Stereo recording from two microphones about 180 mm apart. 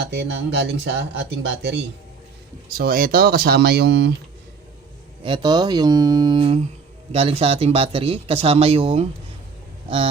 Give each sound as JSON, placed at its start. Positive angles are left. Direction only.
{"t": 0.0, "sound": "speech", "side_deg": -75}
{"t": 2.6, "sound": "speech", "side_deg": -60}
{"t": 5.2, "sound": "speech", "side_deg": -25}